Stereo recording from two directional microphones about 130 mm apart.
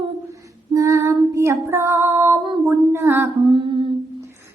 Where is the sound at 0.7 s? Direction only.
25° right (ahead or behind).